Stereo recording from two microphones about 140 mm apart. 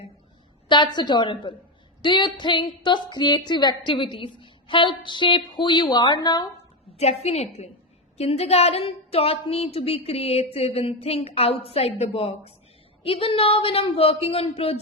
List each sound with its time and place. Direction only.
0.7 s a woman's voice: 30° left (ahead or behind)
6.9 s a woman's voice: 50° left (ahead or behind)